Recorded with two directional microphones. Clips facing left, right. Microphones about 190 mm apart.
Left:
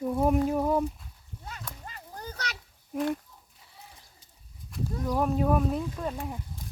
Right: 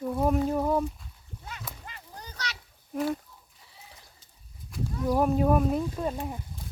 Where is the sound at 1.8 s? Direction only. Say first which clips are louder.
Left 4 dB; 45° left (ahead or behind).